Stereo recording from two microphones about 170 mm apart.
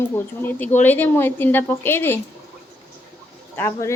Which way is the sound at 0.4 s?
10° left (ahead or behind).